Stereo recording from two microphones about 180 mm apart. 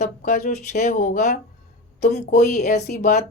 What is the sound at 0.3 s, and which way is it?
Speech, 40° left (ahead or behind).